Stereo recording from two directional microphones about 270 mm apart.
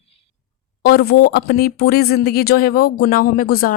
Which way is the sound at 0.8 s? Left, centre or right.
Left.